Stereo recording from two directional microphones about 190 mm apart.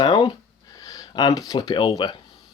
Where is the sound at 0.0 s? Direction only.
25° left (ahead or behind).